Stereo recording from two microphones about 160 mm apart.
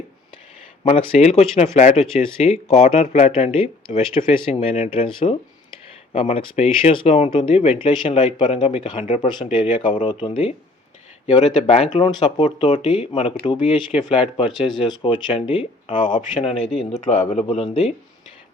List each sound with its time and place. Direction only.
0.9 s speech: 40° left (ahead or behind)